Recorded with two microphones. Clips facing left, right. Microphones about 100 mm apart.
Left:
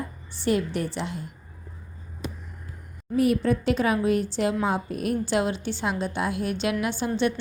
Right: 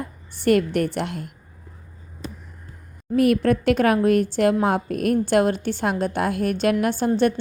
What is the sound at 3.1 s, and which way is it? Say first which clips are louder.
A woman's voice: right 4 dB; 65° right (ahead or behind).